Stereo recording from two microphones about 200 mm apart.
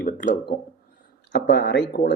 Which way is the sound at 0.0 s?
55° left (ahead or behind).